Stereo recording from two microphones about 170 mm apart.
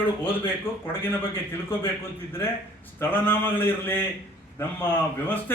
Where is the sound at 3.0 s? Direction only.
10° left (ahead or behind).